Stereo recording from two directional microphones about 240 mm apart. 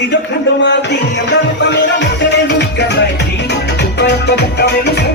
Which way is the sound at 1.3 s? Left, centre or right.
Left.